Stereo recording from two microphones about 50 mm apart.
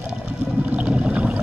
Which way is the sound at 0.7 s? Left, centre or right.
Right.